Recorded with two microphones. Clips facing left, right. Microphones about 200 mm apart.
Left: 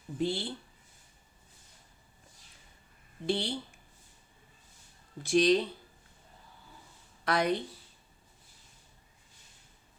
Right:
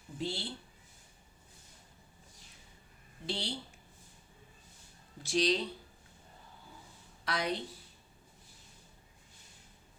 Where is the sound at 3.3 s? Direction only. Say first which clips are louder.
Left 7 dB; 50° left (ahead or behind).